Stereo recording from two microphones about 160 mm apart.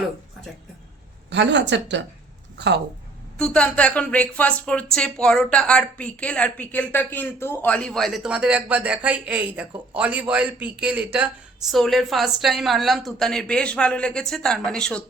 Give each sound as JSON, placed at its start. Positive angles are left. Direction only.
{"t": 1.3, "sound": "speech", "side_deg": -90}
{"t": 3.3, "sound": "speech", "side_deg": 5}